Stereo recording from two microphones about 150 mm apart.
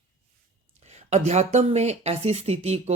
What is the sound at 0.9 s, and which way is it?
Speech, 50° right (ahead or behind).